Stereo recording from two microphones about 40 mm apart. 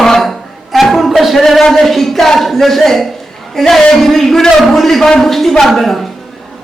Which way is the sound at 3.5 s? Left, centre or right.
Centre.